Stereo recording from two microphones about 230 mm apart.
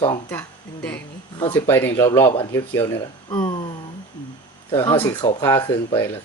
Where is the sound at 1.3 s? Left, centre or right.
Centre.